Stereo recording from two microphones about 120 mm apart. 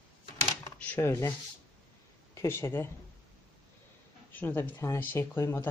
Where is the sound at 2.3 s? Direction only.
20° left (ahead or behind).